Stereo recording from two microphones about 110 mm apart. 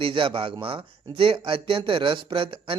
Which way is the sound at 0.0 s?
50° right (ahead or behind).